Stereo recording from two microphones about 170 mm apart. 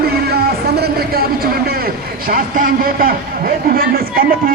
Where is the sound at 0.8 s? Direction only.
65° right (ahead or behind).